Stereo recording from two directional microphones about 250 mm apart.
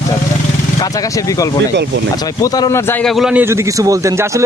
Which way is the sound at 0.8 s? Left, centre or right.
Centre.